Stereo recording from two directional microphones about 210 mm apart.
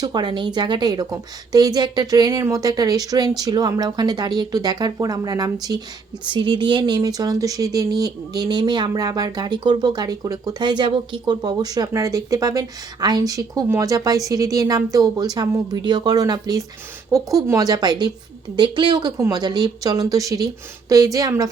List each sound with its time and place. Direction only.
0.0 s speech: 20° right (ahead or behind)